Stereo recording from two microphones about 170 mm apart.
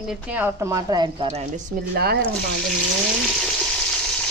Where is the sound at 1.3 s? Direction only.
45° right (ahead or behind).